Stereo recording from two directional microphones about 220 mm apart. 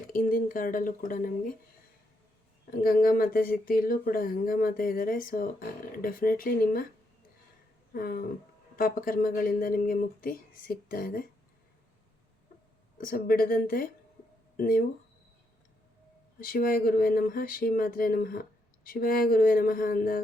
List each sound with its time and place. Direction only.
0.1 s speech: 40° left (ahead or behind)
2.8 s speech: 40° left (ahead or behind)
7.9 s speech: 40° left (ahead or behind)
13.0 s speech: 40° left (ahead or behind)
16.4 s speech: 40° left (ahead or behind)